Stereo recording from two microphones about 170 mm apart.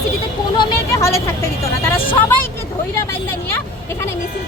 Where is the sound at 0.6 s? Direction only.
20° left (ahead or behind).